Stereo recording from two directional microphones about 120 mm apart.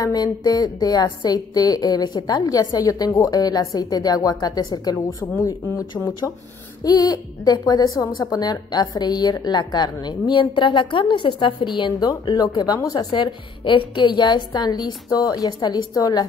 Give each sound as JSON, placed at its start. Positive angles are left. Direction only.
{"t": 0.0, "sound": "a woman's voice", "side_deg": 35}
{"t": 5.2, "sound": "speech", "side_deg": 20}
{"t": 6.8, "sound": "a woman's voice", "side_deg": 35}